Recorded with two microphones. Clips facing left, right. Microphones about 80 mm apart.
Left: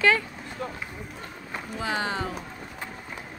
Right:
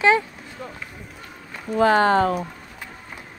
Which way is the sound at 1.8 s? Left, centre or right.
Right.